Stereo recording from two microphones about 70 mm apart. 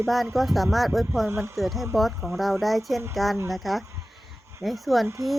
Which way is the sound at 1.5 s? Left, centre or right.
Centre.